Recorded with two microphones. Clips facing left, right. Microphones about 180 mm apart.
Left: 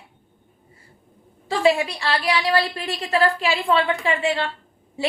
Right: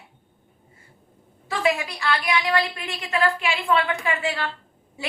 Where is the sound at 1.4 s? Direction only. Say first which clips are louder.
Left 5 dB; 30° left (ahead or behind).